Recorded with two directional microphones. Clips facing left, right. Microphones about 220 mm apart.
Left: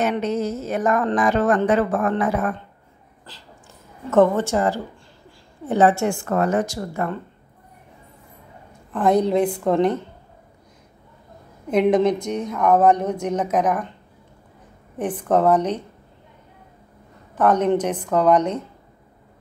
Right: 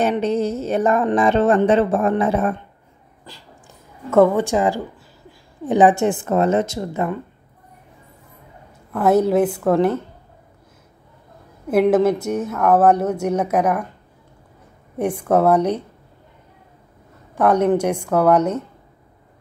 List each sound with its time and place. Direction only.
0.0 s a woman's voice: 30° right (ahead or behind)
3.3 s a woman's voice: 15° right (ahead or behind)
8.9 s speech: 5° right (ahead or behind)
11.7 s speech: 5° right (ahead or behind)
15.0 s speech: 10° right (ahead or behind)
17.4 s speech: 10° right (ahead or behind)